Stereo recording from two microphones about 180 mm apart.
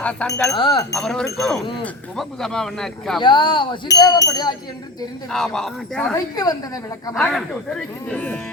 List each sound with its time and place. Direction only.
0.0 s speech: 5° left (ahead or behind)
0.4 s speech: 25° left (ahead or behind)
1.0 s speech: 5° left (ahead or behind)
3.2 s speech: 25° left (ahead or behind)
5.3 s speech: 5° left (ahead or behind)
6.3 s speech: 20° left (ahead or behind)
7.1 s speech: 5° left (ahead or behind)